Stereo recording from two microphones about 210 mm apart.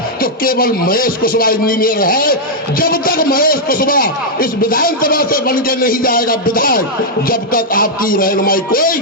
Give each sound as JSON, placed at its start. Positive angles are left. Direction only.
{"t": 0.2, "sound": "speech", "side_deg": 45}